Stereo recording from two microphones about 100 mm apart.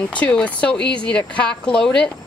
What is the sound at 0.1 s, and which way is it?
Speech, 15° left (ahead or behind).